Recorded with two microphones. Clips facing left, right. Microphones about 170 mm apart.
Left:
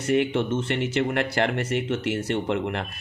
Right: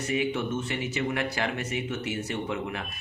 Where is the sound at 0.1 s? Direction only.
70° left (ahead or behind).